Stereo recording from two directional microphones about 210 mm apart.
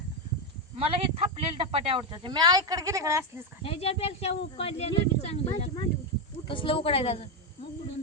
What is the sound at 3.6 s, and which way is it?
Speech, 25° left (ahead or behind).